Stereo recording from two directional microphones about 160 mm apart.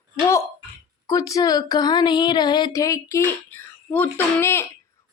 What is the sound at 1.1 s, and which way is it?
A woman's voice, 20° left (ahead or behind).